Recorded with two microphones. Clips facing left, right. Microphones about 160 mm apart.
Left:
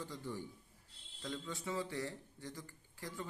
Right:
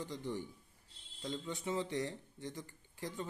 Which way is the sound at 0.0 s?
20° right (ahead or behind).